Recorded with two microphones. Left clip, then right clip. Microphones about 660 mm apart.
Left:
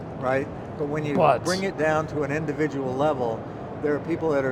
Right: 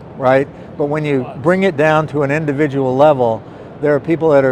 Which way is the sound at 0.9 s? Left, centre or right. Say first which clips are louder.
Right 2 dB; right.